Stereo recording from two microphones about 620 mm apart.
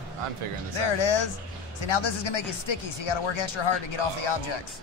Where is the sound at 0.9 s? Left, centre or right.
Left.